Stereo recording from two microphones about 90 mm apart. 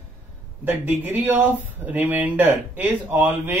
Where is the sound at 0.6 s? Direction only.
20° right (ahead or behind).